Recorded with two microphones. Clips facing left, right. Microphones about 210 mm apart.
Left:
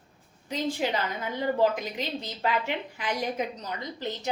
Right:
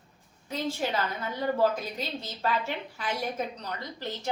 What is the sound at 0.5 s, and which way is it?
A woman's voice, 15° left (ahead or behind).